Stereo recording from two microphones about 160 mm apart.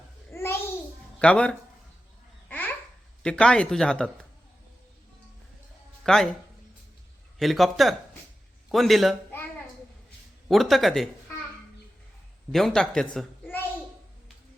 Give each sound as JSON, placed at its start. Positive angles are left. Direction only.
{"t": 0.3, "sound": "a sound", "side_deg": 15}
{"t": 1.2, "sound": "speech", "side_deg": 5}
{"t": 2.5, "sound": "babbling", "side_deg": 10}
{"t": 3.2, "sound": "speech", "side_deg": 5}
{"t": 6.0, "sound": "music", "side_deg": 0}
{"t": 7.3, "sound": "speech", "side_deg": 0}
{"t": 10.5, "sound": "speech", "side_deg": 0}
{"t": 12.5, "sound": "speech", "side_deg": 5}